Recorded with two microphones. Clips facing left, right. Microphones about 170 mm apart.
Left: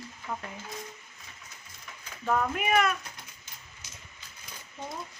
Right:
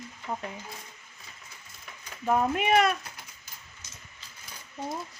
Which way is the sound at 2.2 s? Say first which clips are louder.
Right 3 dB; 20° right (ahead or behind).